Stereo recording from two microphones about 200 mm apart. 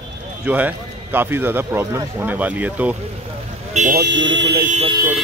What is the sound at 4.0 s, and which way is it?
Speech, 65° right (ahead or behind).